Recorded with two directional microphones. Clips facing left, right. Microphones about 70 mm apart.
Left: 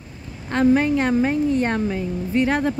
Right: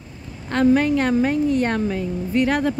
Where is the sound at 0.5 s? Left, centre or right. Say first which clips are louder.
Even; centre.